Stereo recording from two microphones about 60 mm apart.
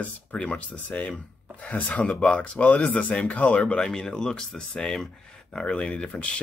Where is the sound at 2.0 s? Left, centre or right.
Centre.